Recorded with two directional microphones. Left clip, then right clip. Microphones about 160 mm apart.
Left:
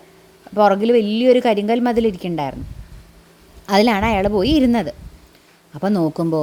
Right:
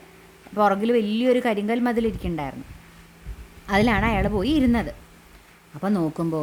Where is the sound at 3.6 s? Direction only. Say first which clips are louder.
Left 5 dB; 25° left (ahead or behind).